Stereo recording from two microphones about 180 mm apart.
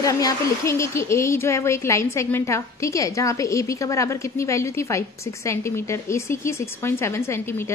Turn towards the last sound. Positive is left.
turn(degrees=15)  # may be behind; listen again after turning